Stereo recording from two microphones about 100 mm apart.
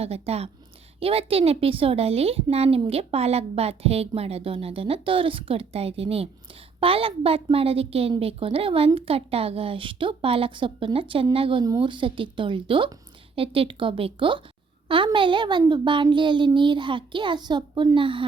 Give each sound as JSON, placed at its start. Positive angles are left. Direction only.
{"t": 0.0, "sound": "a woman's voice", "side_deg": -90}
{"t": 0.9, "sound": "a woman's voice", "side_deg": -75}
{"t": 6.7, "sound": "a woman's voice", "side_deg": -65}